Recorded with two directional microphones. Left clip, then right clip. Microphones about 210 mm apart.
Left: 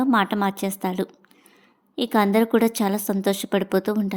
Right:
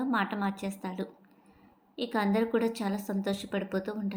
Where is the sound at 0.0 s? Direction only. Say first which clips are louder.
Left 10 dB; 40° left (ahead or behind).